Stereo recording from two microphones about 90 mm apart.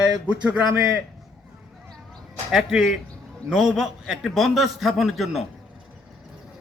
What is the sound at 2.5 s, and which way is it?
A man's voice, 5° right (ahead or behind).